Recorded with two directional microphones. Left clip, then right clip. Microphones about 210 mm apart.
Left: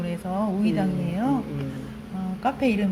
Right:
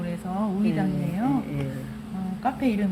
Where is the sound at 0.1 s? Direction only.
15° left (ahead or behind).